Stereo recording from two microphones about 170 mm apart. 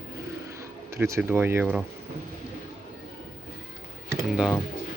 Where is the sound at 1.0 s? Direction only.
15° right (ahead or behind).